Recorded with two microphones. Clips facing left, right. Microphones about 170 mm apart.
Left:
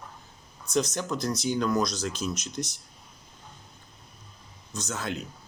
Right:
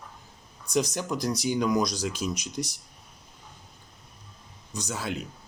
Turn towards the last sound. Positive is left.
turn(degrees=-10)  # may be behind; listen again after turning